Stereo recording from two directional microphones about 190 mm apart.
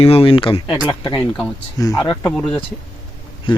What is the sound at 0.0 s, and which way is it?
Speech, 30° left (ahead or behind).